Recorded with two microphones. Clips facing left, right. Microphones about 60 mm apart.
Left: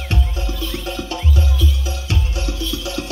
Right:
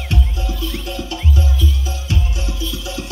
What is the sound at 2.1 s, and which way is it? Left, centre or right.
Music, left.